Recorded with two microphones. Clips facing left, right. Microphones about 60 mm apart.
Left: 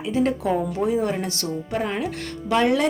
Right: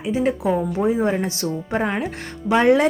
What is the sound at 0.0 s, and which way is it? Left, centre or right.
Speech, centre.